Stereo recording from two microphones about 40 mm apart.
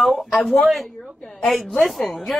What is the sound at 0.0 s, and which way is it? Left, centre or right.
Speech, centre.